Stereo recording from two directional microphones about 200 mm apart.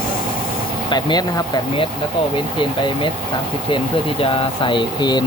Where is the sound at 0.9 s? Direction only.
20° left (ahead or behind).